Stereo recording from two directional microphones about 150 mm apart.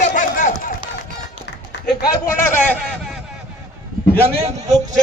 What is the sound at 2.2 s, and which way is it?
Speech, 15° left (ahead or behind).